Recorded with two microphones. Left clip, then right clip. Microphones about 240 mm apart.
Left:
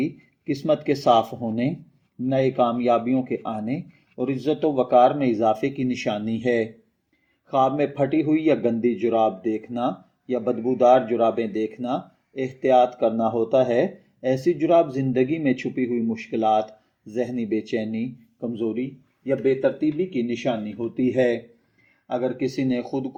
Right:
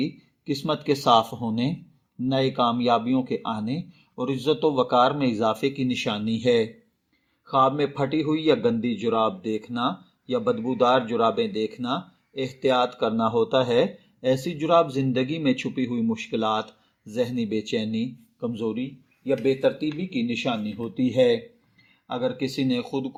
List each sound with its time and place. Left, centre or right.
0.0 s a man's voice: right